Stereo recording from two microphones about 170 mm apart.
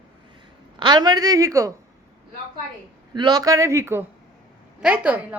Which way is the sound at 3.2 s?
25° right (ahead or behind).